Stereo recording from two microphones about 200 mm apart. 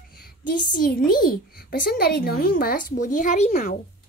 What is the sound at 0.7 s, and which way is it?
A child's voice, 45° left (ahead or behind).